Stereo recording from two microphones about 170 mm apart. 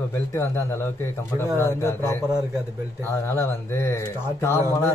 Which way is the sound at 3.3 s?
15° left (ahead or behind).